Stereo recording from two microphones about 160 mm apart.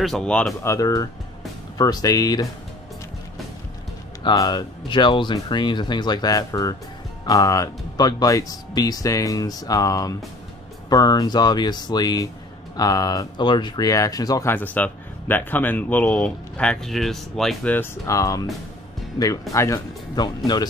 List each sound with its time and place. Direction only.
0.0 s speech: 5° left (ahead or behind)
0.7 s speech: 20° left (ahead or behind)
4.2 s speech: 25° left (ahead or behind); by 17.7 s centre (ahead or behind)
17.7 s speech: 20° left (ahead or behind)